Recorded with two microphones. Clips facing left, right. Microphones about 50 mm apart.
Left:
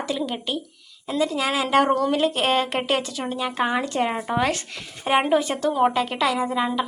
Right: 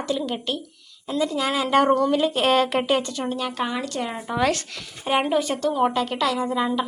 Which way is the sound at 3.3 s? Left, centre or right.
Centre.